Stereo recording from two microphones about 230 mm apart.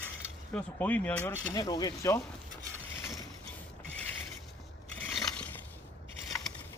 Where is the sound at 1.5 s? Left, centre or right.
Centre.